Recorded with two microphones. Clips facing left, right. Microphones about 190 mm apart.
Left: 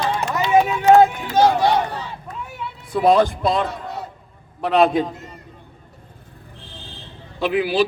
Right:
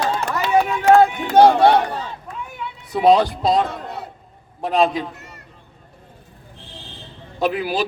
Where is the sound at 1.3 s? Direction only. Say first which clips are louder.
Right 4 dB; 60° right (ahead or behind).